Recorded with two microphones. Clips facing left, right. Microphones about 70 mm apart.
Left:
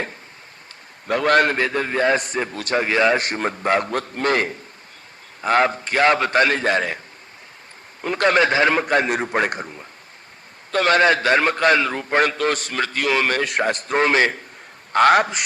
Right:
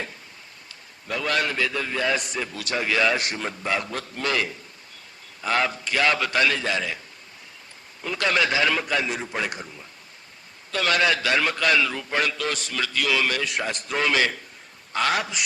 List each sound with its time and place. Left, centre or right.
1.0 s a man's voice: left
8.0 s a man's voice: left
14.9 s a man's voice: left